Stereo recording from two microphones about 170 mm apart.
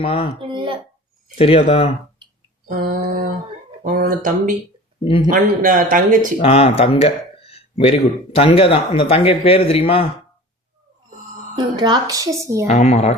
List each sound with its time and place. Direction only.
0.0 s speech: 30° left (ahead or behind)
0.3 s a sound: 30° right (ahead or behind)
1.4 s speech: 35° left (ahead or behind)
2.6 s speech: 55° right (ahead or behind)
6.4 s speech: 35° left (ahead or behind)
11.5 s a woman's voice: 25° right (ahead or behind)
12.6 s speech: 40° left (ahead or behind)